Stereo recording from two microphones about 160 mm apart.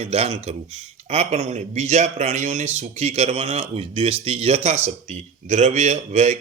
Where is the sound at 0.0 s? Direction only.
40° right (ahead or behind).